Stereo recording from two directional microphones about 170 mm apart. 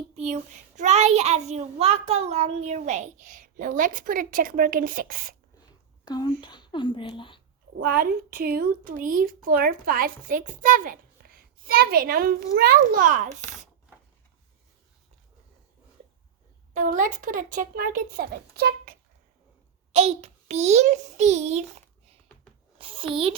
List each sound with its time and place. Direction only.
0.2 s a child's voice: 40° right (ahead or behind)
6.1 s speech: 25° left (ahead or behind)
7.8 s a woman's voice: 60° right (ahead or behind)
16.7 s a child's voice: 50° right (ahead or behind)
19.9 s a child's voice: 40° right (ahead or behind)